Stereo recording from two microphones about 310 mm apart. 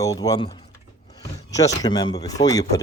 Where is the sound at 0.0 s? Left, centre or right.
Centre.